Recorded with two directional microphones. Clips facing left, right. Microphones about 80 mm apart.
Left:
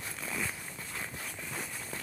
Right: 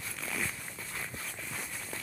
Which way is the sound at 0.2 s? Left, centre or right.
Centre.